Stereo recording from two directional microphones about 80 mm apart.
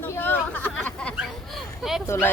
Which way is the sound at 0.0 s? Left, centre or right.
Left.